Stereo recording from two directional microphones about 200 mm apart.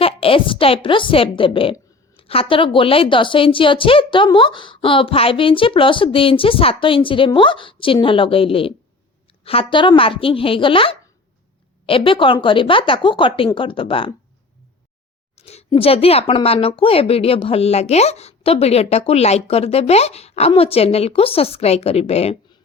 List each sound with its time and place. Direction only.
0.0 s a woman's voice: 30° left (ahead or behind)
15.4 s speech: 30° left (ahead or behind)